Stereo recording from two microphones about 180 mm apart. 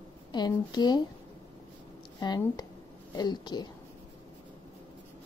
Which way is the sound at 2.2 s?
25° left (ahead or behind).